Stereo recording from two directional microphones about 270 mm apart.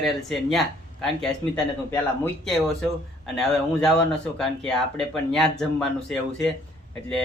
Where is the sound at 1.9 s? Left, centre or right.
Centre.